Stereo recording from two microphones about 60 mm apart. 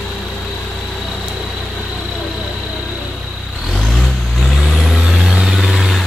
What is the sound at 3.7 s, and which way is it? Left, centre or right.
Vehicle, centre.